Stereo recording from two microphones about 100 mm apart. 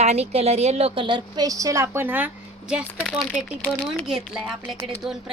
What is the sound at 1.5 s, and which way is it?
Speech, 35° right (ahead or behind).